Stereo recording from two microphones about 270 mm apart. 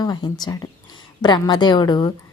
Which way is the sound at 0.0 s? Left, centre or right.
Centre.